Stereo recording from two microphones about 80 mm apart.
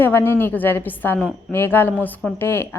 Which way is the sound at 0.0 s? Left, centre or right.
Left.